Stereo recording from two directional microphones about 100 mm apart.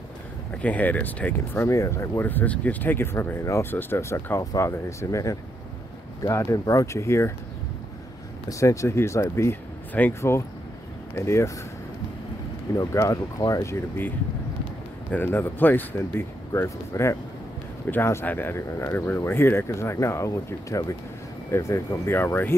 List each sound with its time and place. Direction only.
0.5 s speech: 15° left (ahead or behind); by 7.3 s 30° left (ahead or behind)
8.5 s speech: 30° left (ahead or behind)
12.7 s speech: 35° left (ahead or behind)